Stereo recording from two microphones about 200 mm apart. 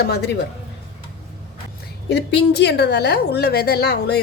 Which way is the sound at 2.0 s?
60° left (ahead or behind).